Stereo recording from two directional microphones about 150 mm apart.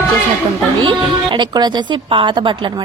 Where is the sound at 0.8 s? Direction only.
30° right (ahead or behind).